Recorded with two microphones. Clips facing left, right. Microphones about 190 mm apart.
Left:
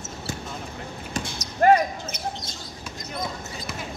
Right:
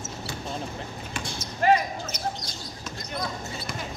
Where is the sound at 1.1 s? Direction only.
45° left (ahead or behind).